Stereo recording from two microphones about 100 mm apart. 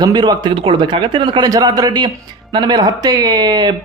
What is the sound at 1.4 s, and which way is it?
Speech, 40° right (ahead or behind).